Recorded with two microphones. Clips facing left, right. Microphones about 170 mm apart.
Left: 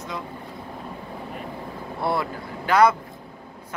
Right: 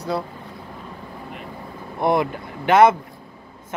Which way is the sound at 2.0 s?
20° right (ahead or behind).